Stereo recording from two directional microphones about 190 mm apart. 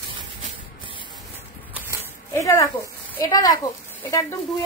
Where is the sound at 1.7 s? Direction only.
10° right (ahead or behind).